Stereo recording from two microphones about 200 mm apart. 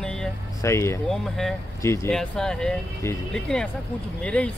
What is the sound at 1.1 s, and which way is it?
Speech, centre (ahead or behind).